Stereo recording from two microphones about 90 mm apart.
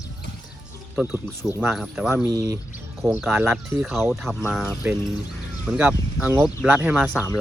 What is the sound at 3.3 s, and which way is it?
Speech, 25° right (ahead or behind).